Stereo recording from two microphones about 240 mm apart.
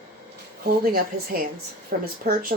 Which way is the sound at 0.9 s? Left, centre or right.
Right.